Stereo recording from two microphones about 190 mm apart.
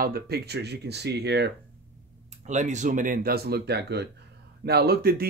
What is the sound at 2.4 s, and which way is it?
Speech, 40° right (ahead or behind).